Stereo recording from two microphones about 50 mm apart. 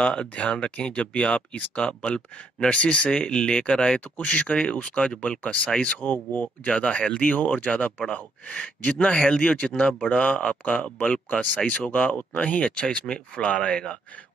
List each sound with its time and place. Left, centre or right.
0.0 s speech: left
5.4 s speech: left
5.7 s speech: centre
5.9 s speech: left